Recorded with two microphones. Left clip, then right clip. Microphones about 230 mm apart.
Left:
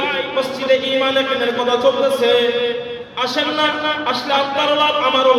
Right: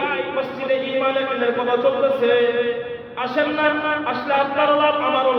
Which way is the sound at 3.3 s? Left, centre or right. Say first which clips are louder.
Even; left.